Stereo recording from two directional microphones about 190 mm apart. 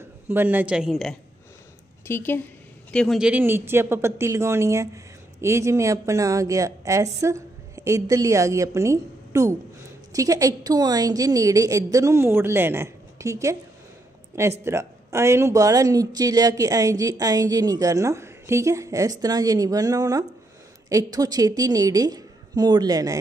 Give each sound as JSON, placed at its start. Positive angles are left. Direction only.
{"t": 0.3, "sound": "speech", "side_deg": -10}
{"t": 2.0, "sound": "a woman's voice", "side_deg": 10}
{"t": 14.6, "sound": "speech", "side_deg": -15}